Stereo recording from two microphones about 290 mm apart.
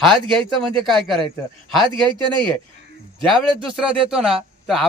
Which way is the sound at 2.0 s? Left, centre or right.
Centre.